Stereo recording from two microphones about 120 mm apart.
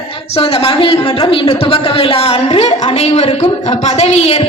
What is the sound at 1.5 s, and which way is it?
A woman's voice, 55° left (ahead or behind).